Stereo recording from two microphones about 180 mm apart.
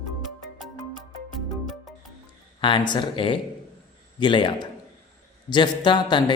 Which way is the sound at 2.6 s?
25° left (ahead or behind).